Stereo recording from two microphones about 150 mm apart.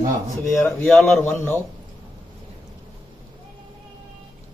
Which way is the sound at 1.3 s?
15° left (ahead or behind).